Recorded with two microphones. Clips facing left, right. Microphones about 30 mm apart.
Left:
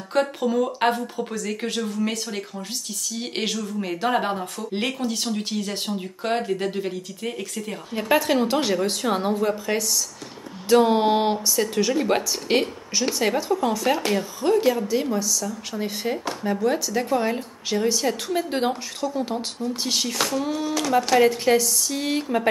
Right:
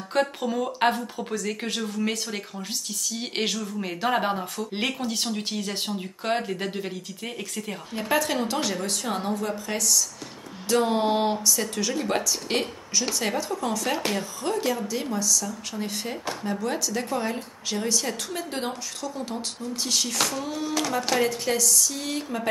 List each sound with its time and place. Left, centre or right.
0.1 s speech: centre
3.1 s speech: centre
7.9 s a woman's voice: centre
21.2 s a woman's voice: centre